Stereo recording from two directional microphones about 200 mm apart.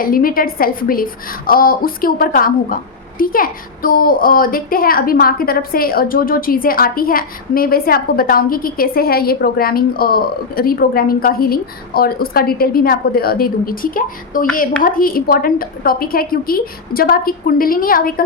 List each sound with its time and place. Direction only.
0.0 s a woman's voice: 45° left (ahead or behind)